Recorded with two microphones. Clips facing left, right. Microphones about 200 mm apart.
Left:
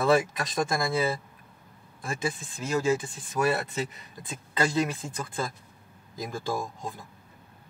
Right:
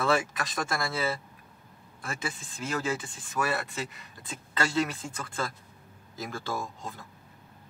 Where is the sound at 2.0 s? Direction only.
15° left (ahead or behind).